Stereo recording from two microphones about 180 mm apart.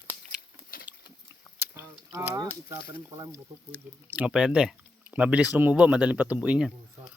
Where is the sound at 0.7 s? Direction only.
50° left (ahead or behind).